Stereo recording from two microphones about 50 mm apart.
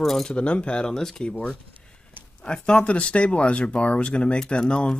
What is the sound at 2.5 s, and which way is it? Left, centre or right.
Speech, left.